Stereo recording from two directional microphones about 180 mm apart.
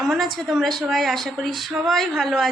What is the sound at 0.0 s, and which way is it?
A woman's voice, centre (ahead or behind).